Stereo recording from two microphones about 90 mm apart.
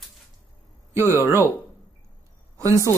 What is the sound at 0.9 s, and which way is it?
Speech, 25° right (ahead or behind).